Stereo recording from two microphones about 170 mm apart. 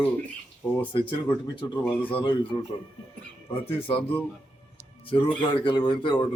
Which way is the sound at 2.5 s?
30° left (ahead or behind).